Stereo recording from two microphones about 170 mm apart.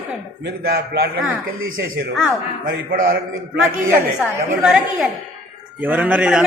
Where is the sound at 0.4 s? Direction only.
65° right (ahead or behind).